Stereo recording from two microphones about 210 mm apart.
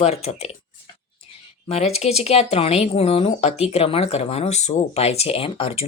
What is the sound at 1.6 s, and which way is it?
Speech, 30° left (ahead or behind).